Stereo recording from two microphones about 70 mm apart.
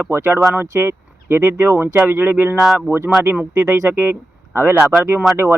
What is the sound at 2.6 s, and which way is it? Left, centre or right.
Speech, centre.